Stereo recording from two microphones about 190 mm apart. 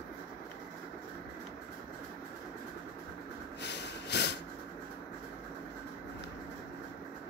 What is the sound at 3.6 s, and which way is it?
Snort, 65° left (ahead or behind).